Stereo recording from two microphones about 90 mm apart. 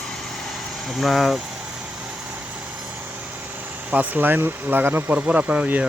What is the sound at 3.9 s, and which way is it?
Speech, 20° right (ahead or behind).